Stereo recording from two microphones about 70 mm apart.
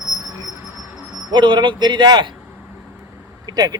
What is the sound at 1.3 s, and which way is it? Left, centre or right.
Speech, right.